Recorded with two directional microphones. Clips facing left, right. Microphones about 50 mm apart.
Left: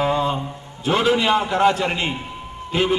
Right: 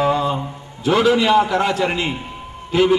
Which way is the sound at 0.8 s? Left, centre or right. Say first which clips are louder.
Right 3 dB; left.